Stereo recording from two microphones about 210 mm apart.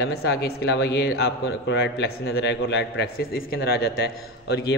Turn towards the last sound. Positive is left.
turn(degrees=50)  # may be behind; listen again after turning